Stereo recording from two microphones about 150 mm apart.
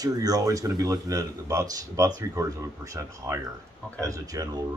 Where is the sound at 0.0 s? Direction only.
25° right (ahead or behind).